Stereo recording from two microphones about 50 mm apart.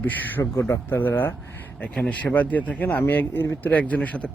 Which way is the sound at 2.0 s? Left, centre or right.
Left.